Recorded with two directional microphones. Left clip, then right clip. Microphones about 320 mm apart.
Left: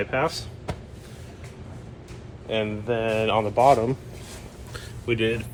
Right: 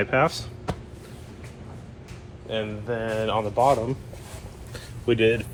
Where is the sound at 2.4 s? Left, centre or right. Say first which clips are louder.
Left 3 dB; centre.